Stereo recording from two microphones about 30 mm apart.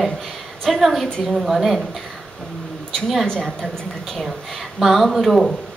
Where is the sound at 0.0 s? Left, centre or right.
Centre.